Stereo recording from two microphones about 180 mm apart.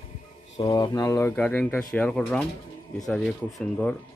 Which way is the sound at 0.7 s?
20° left (ahead or behind).